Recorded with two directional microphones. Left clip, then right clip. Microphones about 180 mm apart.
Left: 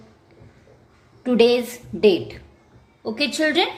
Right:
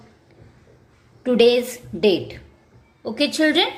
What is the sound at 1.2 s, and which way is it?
A woman's voice, 10° right (ahead or behind).